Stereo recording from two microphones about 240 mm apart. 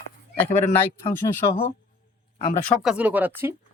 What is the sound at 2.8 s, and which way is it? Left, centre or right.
Speech, centre.